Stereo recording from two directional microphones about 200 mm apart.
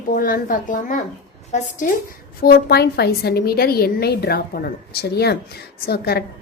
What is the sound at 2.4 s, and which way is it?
Speech, 50° left (ahead or behind).